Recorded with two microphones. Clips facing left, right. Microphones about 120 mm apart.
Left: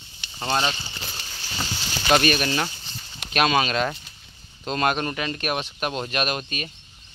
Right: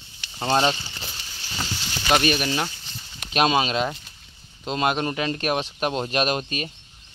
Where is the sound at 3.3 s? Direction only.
25° right (ahead or behind).